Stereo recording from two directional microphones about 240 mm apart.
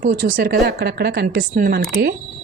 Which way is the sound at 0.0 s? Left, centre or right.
Right.